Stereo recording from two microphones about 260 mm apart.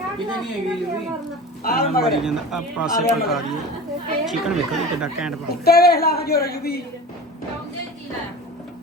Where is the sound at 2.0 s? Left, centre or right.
Centre.